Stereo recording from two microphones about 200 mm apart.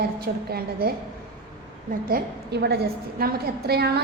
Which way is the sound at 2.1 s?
55° right (ahead or behind).